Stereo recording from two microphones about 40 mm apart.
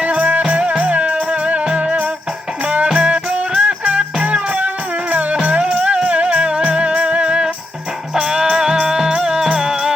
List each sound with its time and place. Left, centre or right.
0.0 s music: right
0.8 s music: right
8.1 s music: centre